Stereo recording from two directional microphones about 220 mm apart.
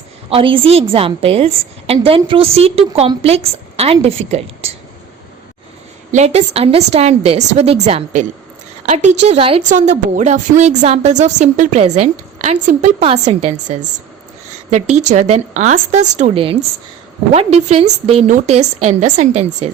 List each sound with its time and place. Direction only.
0.3 s a woman's voice: 25° right (ahead or behind)
6.1 s a woman's voice: 30° right (ahead or behind)